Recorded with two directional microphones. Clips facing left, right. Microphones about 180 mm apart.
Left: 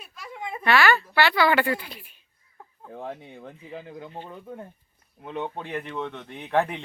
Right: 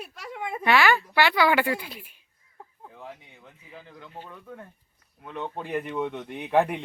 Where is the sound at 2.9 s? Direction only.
50° left (ahead or behind).